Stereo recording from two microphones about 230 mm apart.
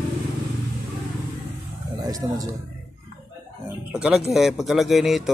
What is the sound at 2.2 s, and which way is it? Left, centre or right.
Speech, centre.